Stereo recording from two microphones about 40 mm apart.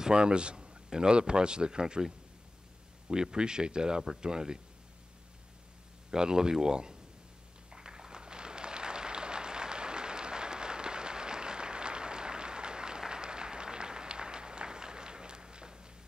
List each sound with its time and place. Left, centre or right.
0.0 s a man's voice: right
6.0 s speech: centre
7.7 s applause: centre